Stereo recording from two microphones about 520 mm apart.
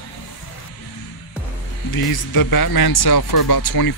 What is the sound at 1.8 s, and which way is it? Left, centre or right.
Speech, left.